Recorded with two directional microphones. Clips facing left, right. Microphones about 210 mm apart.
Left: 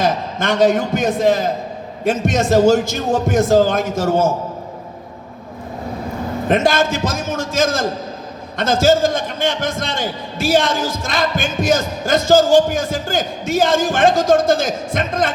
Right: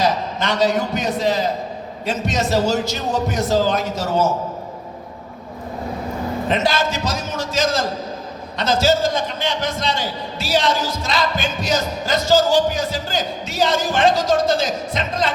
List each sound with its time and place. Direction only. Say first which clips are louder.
0.0 s a man's voice: left 1 dB; 50° left (ahead or behind)
6.5 s a man's voice: left 5 dB; 50° left (ahead or behind)